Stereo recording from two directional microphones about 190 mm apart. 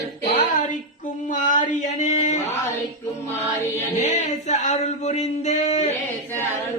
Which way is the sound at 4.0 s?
35° left (ahead or behind).